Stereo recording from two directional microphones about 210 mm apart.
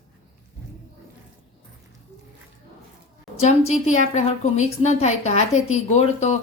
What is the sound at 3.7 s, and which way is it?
A woman's voice, 35° left (ahead or behind).